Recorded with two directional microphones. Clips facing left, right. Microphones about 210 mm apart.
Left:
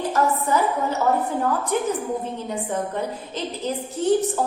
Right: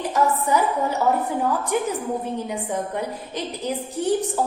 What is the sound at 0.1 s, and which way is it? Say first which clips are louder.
A woman's voice: right 2 dB; 15° right (ahead or behind).